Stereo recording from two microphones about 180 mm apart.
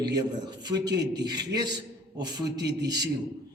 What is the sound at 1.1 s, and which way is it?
A man's voice, 20° right (ahead or behind).